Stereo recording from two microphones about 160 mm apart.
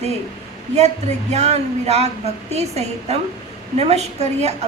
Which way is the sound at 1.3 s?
45° right (ahead or behind).